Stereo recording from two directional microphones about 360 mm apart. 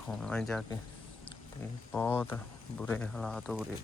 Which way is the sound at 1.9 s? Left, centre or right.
Centre.